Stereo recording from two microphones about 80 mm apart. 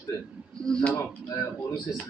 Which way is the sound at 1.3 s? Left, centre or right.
Left.